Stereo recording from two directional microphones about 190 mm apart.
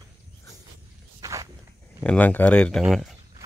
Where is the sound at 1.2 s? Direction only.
15° right (ahead or behind).